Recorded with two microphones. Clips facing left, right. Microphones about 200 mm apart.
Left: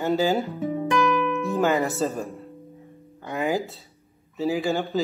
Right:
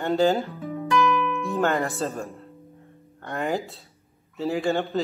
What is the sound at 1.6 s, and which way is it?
Speech, centre (ahead or behind).